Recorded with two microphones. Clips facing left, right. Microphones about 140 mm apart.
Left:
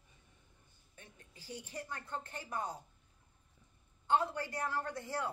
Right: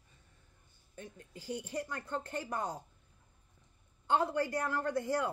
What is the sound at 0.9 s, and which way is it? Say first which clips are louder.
Speech: right 11 dB; 40° right (ahead or behind).